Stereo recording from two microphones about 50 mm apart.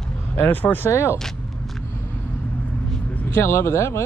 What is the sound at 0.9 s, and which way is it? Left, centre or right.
Speech, left.